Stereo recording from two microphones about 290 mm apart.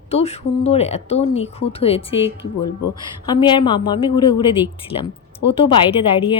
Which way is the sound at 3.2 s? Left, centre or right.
Centre.